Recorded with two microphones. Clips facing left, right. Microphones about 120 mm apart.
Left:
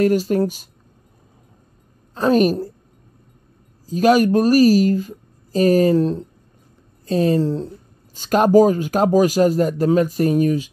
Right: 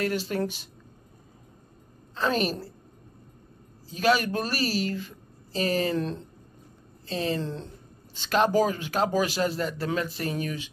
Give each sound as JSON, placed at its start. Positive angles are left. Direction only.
{"t": 0.0, "sound": "a woman's voice", "side_deg": 45}
{"t": 2.1, "sound": "a woman's voice", "side_deg": 45}
{"t": 3.8, "sound": "a woman's voice", "side_deg": 45}
{"t": 7.1, "sound": "a woman's voice", "side_deg": 45}